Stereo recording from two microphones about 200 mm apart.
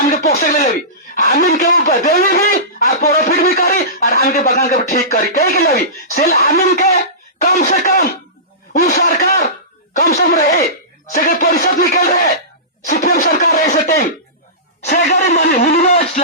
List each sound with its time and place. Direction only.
0.1 s music: 50° left (ahead or behind)
1.1 s speech: 45° left (ahead or behind)